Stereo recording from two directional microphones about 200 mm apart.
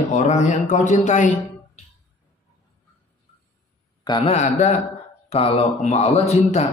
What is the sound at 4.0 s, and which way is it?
A man's voice, 25° left (ahead or behind).